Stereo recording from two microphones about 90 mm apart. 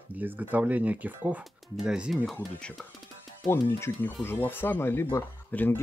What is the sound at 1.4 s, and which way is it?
Speech, 5° right (ahead or behind).